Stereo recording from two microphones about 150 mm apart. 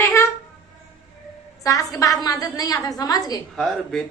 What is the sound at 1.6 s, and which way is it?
A woman's voice, 20° left (ahead or behind).